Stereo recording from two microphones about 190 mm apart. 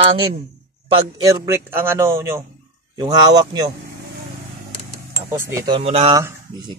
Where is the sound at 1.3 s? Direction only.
15° right (ahead or behind).